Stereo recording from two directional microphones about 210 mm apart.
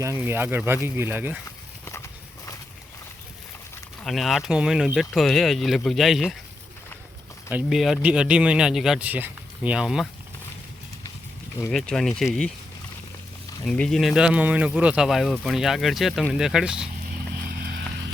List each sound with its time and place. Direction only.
0.0 s speech: 10° right (ahead or behind)
1.8 s a sound: 15° left (ahead or behind)
4.0 s speech: centre (ahead or behind)
7.5 s speech: centre (ahead or behind)
11.6 s speech: 5° left (ahead or behind)
13.7 s speech: 5° left (ahead or behind)
17.5 s vehicle: 50° right (ahead or behind)